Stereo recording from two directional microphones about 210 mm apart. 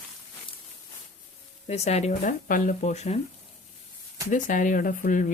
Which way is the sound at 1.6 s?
30° left (ahead or behind).